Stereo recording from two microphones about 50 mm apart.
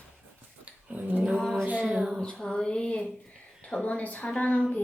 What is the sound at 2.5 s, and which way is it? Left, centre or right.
Speech, centre.